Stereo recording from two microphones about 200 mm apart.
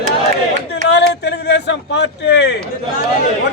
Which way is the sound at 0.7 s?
60° left (ahead or behind).